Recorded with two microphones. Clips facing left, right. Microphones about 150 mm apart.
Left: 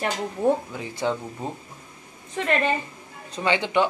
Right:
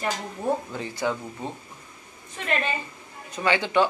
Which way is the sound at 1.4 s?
35° left (ahead or behind).